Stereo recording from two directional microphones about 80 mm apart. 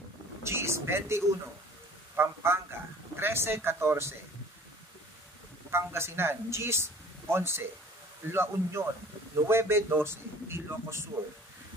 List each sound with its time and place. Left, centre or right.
0.4 s a sound: right
2.1 s a man's voice: right
5.7 s a man's voice: right